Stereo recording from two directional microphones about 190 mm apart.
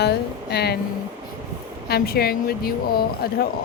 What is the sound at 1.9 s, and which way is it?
Speech, 55° left (ahead or behind).